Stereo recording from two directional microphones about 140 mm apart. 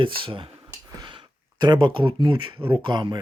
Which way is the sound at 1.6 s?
35° right (ahead or behind).